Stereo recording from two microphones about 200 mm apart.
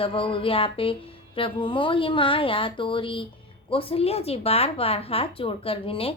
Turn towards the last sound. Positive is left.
turn(degrees=30)  # may be behind; listen again after turning